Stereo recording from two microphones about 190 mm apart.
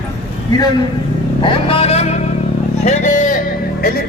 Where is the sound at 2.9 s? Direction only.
40° left (ahead or behind).